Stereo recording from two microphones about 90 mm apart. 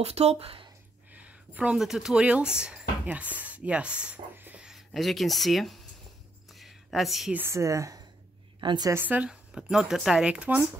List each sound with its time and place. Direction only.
0.0 s speech: 90° right
1.1 s speech: 15° right (ahead or behind)
4.6 s speech: centre (ahead or behind)
6.5 s a sound: centre (ahead or behind)
7.3 s speech: 30° right (ahead or behind)
8.5 s a woman's voice: 50° right (ahead or behind)
8.9 s speech: 20° right (ahead or behind)